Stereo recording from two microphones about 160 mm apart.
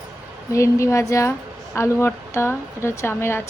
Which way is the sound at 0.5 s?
20° left (ahead or behind).